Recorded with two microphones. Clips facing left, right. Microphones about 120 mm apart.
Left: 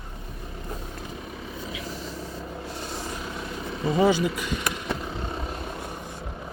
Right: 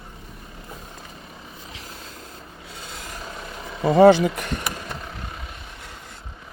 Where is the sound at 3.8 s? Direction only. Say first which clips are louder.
Right 8 dB; 65° right (ahead or behind).